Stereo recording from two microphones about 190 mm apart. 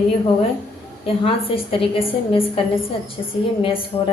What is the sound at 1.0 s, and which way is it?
A woman's voice, 30° left (ahead or behind).